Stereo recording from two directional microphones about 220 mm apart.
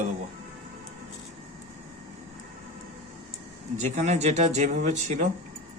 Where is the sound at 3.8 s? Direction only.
30° right (ahead or behind).